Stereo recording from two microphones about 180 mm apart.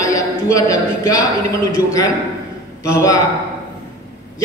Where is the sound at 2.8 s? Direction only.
15° left (ahead or behind).